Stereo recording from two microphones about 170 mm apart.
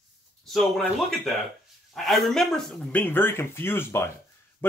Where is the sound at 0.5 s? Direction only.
Centre (ahead or behind).